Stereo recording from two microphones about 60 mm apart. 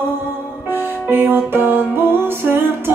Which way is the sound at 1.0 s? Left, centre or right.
Right.